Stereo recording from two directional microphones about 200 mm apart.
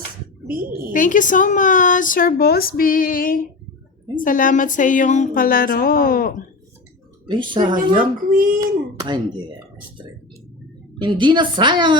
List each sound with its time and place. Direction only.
0.9 s speech: 40° left (ahead or behind)
7.3 s a woman's voice: 25° right (ahead or behind)
8.3 s speech: 45° right (ahead or behind)
8.6 s a woman's voice: 20° right (ahead or behind)
10.9 s a woman's voice: 25° right (ahead or behind)